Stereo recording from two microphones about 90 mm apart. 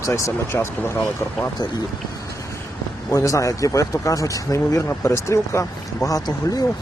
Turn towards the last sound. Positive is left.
turn(degrees=40)  # may be behind; listen again after turning